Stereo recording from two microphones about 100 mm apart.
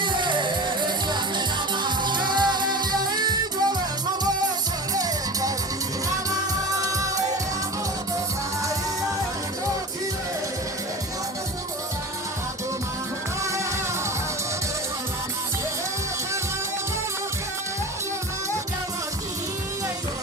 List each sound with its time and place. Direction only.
0.0 s music: 55° right (ahead or behind)
4.9 s music: 35° right (ahead or behind)